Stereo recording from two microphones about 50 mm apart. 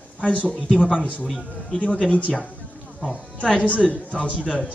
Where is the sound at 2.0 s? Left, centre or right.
Left.